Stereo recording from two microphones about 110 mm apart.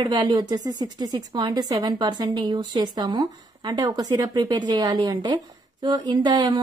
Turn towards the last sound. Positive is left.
turn(degrees=-40)  # may be behind; listen again after turning